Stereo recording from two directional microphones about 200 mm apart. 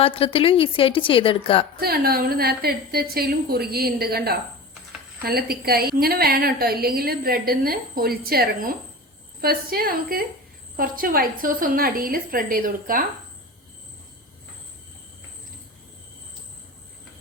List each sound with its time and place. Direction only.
0.0 s a woman's voice: 25° left (ahead or behind)
1.8 s a woman's voice: 50° right (ahead or behind)